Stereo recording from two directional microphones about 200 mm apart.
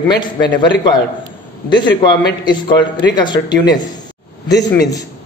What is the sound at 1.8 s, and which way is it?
Speech, 60° left (ahead or behind).